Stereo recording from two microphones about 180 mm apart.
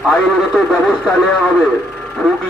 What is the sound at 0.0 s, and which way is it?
A man's voice, 5° left (ahead or behind).